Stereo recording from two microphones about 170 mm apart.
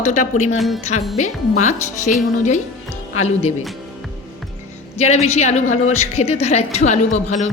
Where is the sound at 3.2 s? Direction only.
40° left (ahead or behind).